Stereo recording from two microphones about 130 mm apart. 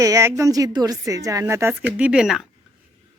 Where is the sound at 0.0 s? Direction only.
25° right (ahead or behind); by 2.5 s 5° right (ahead or behind).